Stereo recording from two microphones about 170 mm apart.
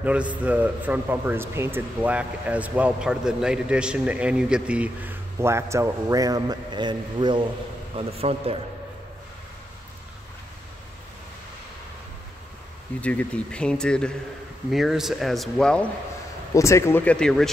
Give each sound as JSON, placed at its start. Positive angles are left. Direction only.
{"t": 0.0, "sound": "a man's voice", "side_deg": -10}
{"t": 13.0, "sound": "speech", "side_deg": 10}
{"t": 16.5, "sound": "speech", "side_deg": 15}